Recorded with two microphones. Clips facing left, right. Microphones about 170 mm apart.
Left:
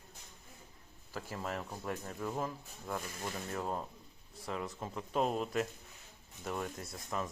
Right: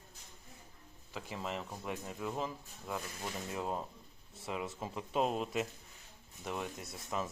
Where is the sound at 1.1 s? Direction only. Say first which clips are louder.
Left 1 dB; centre (ahead or behind).